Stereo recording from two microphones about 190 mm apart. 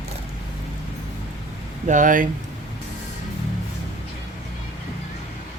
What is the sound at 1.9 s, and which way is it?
Speech, 45° right (ahead or behind).